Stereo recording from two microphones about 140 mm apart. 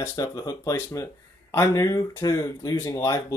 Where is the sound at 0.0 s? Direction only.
25° left (ahead or behind).